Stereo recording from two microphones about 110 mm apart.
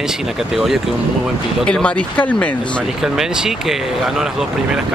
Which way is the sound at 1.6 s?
10° left (ahead or behind).